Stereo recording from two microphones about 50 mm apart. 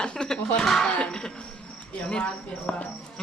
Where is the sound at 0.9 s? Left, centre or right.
Left.